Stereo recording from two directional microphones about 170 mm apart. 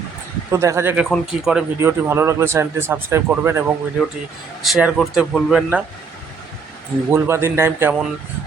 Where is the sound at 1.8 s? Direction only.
15° right (ahead or behind).